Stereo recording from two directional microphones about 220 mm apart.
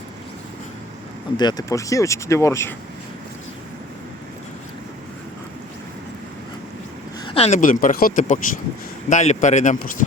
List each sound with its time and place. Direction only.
1.4 s speech: 20° left (ahead or behind)
7.3 s speech: 25° left (ahead or behind)